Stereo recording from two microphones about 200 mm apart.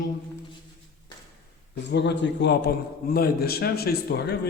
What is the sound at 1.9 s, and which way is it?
A man's voice, 60° left (ahead or behind).